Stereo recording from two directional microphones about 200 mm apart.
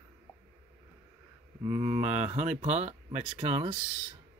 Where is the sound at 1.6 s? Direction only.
15° right (ahead or behind).